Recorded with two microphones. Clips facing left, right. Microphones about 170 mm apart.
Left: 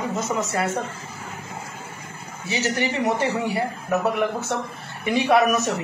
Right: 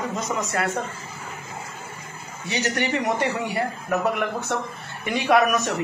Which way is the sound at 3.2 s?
30° left (ahead or behind).